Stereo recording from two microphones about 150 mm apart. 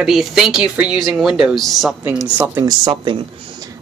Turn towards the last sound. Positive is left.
turn(degrees=-30)  # may be behind; listen again after turning